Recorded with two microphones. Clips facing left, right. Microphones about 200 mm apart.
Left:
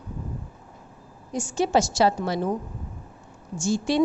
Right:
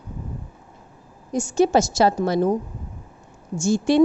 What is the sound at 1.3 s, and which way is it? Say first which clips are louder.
A woman's voice: right 5 dB; 45° right (ahead or behind).